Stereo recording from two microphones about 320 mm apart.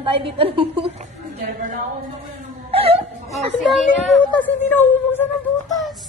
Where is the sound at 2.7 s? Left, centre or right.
Centre.